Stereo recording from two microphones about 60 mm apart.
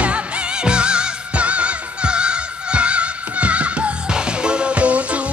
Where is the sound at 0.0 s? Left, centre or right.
Centre.